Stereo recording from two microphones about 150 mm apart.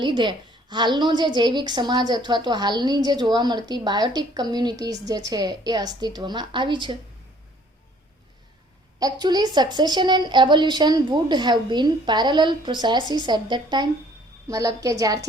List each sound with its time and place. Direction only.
0.0 s a woman's voice: 30° right (ahead or behind)
9.0 s a woman's voice: 25° right (ahead or behind)